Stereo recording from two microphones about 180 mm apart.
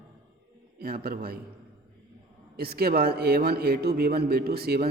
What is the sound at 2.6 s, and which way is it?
A man's voice, 60° right (ahead or behind).